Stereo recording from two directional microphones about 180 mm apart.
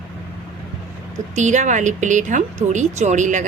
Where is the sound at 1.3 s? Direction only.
40° right (ahead or behind).